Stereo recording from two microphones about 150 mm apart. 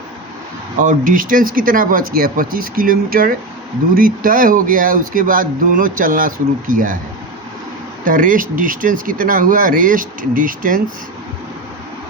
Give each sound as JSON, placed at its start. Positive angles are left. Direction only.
{"t": 0.8, "sound": "speech", "side_deg": -65}
{"t": 8.0, "sound": "speech", "side_deg": -65}